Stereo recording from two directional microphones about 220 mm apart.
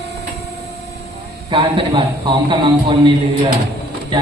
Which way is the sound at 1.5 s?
20° right (ahead or behind).